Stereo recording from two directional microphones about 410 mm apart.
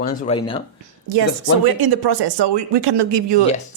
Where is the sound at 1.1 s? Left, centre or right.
Right.